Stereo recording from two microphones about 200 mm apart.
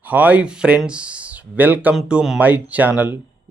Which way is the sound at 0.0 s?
5° right (ahead or behind).